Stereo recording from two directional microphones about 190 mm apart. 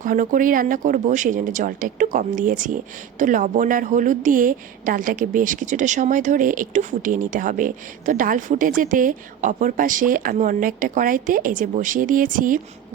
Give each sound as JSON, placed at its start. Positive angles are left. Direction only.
{"t": 0.0, "sound": "a woman's voice", "side_deg": -45}